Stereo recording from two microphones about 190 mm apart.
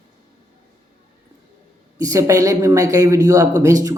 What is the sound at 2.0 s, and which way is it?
Speech, 15° right (ahead or behind).